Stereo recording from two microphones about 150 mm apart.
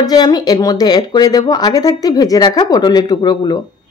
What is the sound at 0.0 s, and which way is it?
Speech, 25° left (ahead or behind).